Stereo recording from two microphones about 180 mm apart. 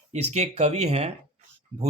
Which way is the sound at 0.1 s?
35° right (ahead or behind).